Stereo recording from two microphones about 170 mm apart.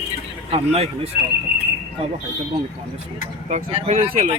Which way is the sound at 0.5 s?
35° right (ahead or behind).